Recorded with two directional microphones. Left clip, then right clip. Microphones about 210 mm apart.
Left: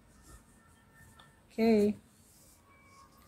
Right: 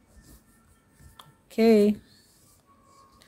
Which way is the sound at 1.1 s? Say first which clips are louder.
Right 9 dB; 50° right (ahead or behind).